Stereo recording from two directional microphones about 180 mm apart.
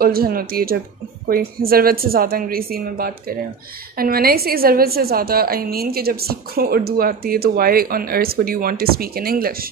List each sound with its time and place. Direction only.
0.0 s a woman's voice: 55° right (ahead or behind)